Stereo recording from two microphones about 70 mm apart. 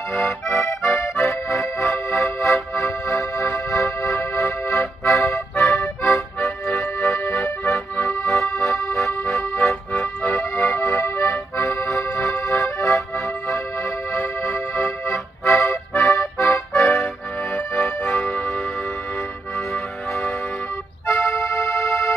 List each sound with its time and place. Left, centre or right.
0.1 s accordion: left
2.2 s music: left
5.2 s accordion: left
9.9 s music: left
10.5 s accordion: left
14.1 s music: left
15.6 s accordion: left
17.8 s accordion: left
18.2 s music: centre
21.2 s tick-tock: left